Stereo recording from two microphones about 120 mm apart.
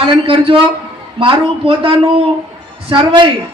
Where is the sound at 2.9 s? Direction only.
40° right (ahead or behind).